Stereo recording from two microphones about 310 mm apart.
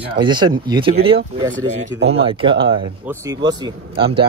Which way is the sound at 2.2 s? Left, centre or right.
Centre.